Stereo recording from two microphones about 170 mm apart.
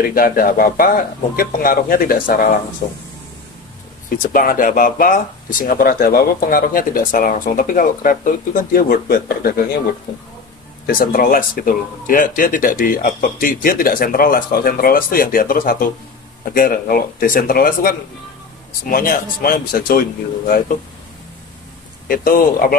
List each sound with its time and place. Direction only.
0.1 s speech: 55° left (ahead or behind)
4.3 s speech: 55° left (ahead or behind)
10.9 s speech: 55° left (ahead or behind)
22.0 s speech: 55° left (ahead or behind)